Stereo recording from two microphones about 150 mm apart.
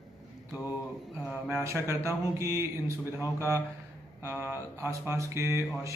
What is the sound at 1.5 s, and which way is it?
Speech, 20° right (ahead or behind).